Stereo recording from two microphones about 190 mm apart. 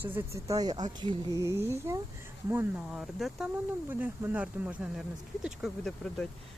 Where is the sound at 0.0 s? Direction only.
10° right (ahead or behind).